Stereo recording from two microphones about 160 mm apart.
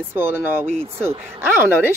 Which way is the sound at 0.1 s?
15° right (ahead or behind).